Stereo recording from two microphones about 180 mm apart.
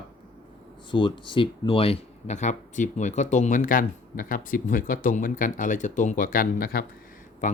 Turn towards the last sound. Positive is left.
turn(degrees=45)  # may be behind; listen again after turning